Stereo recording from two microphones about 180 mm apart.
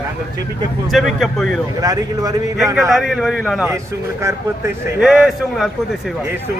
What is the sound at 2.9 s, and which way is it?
Speech, centre (ahead or behind).